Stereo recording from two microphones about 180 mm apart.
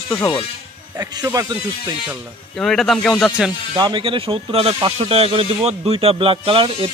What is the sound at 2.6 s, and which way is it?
Speech, centre (ahead or behind).